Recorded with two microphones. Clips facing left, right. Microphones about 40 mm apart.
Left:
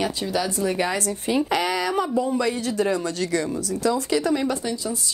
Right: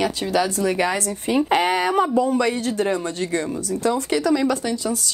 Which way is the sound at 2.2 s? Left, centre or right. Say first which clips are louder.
Right 3 dB; right.